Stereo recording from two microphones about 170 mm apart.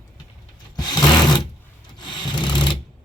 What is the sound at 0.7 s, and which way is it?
Rub, 25° left (ahead or behind).